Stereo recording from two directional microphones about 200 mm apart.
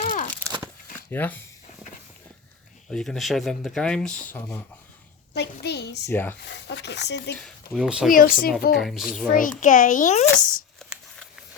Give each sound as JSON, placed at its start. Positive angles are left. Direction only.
{"t": 0.0, "sound": "a sound", "side_deg": 40}
{"t": 1.1, "sound": "speech", "side_deg": 10}
{"t": 2.9, "sound": "speech", "side_deg": 0}
{"t": 5.3, "sound": "speech", "side_deg": 55}
{"t": 6.1, "sound": "speech", "side_deg": 10}
{"t": 6.4, "sound": "speech", "side_deg": 60}
{"t": 7.3, "sound": "speech", "side_deg": 0}
{"t": 8.1, "sound": "a woman's voice", "side_deg": 45}
{"t": 8.7, "sound": "speech", "side_deg": 0}
{"t": 9.2, "sound": "a child's voice", "side_deg": 45}